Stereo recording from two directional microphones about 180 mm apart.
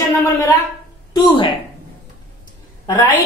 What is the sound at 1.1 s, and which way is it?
Speech, 25° left (ahead or behind).